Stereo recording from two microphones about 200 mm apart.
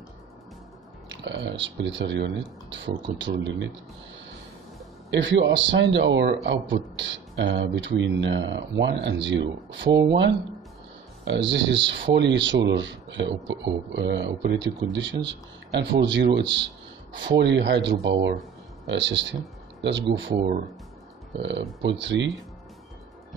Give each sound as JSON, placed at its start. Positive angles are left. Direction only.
{"t": 1.0, "sound": "speech", "side_deg": -65}
{"t": 5.1, "sound": "speech", "side_deg": -65}
{"t": 11.2, "sound": "a man's voice", "side_deg": -65}
{"t": 21.4, "sound": "speech", "side_deg": -60}